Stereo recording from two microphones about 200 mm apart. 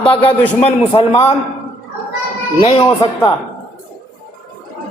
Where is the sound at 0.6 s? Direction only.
30° left (ahead or behind).